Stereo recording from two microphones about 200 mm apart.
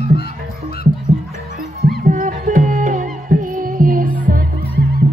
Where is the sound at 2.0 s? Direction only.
40° right (ahead or behind).